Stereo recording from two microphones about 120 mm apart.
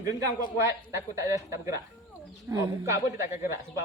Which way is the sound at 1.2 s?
25° right (ahead or behind).